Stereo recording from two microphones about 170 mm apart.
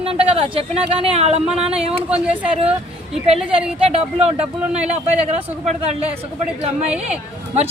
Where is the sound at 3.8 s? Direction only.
35° right (ahead or behind).